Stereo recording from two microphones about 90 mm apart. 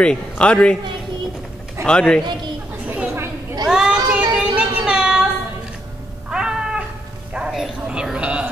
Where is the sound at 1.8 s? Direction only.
10° left (ahead or behind).